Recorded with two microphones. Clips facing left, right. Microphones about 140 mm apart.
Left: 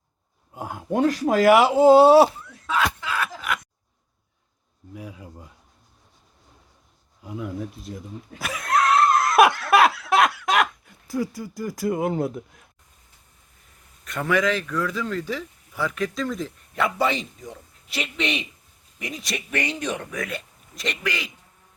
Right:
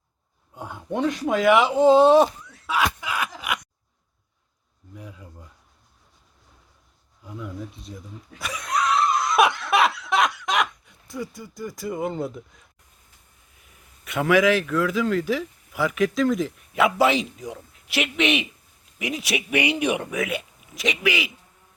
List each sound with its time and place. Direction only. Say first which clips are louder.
1.1 s speech: left 2 dB; centre (ahead or behind)
2.6 s a sound: even; 15° right (ahead or behind)
7.5 s speech: left 4 dB; centre (ahead or behind)
8.8 s laughter: left 3 dB; centre (ahead or behind)
9.4 s snicker: left 3 dB; centre (ahead or behind)
11.9 s speech: left 4 dB; 55° left (ahead or behind)
14.0 s speech: right 4 dB; 5° right (ahead or behind)
18.0 s a man's voice: right 5 dB; 75° right (ahead or behind)
18.9 s speech: right 5 dB; 5° right (ahead or behind)